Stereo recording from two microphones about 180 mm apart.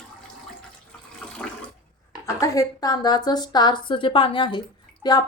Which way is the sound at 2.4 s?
20° left (ahead or behind).